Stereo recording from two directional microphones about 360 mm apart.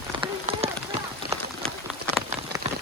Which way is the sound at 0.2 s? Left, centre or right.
Centre.